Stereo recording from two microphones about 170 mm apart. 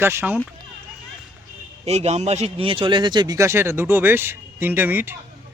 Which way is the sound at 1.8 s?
40° right (ahead or behind).